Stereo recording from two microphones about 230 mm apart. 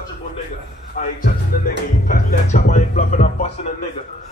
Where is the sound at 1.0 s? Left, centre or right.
Left.